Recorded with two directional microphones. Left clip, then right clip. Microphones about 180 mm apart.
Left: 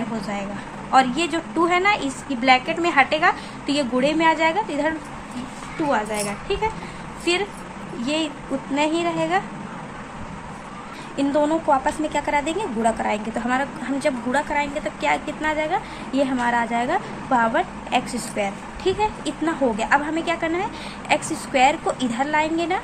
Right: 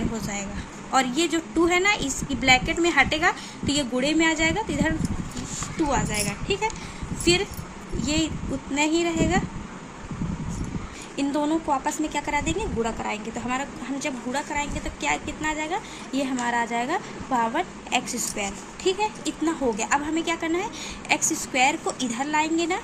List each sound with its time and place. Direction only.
0.2 s a woman's voice: 20° right (ahead or behind)
5.9 s a woman's voice: 20° right (ahead or behind)
11.2 s a woman's voice: 15° right (ahead or behind)